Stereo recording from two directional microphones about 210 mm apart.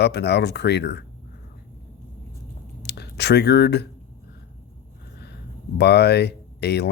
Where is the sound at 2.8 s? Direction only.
50° left (ahead or behind).